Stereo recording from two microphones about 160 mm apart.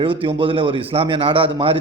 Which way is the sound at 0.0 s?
30° right (ahead or behind).